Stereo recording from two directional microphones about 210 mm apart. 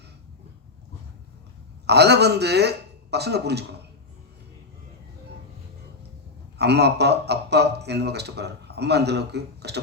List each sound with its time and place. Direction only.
1.9 s speech: 50° right (ahead or behind)
6.6 s speech: 50° right (ahead or behind)